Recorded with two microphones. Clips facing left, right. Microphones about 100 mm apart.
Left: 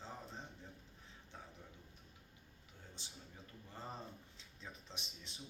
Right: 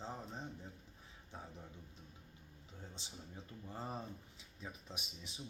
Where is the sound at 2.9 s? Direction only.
20° right (ahead or behind).